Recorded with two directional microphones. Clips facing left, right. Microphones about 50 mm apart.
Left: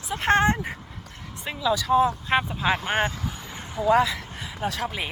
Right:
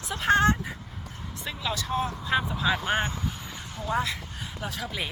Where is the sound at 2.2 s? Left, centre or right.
Left.